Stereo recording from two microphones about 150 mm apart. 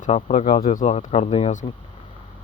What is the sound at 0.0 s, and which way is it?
Speech, 50° left (ahead or behind).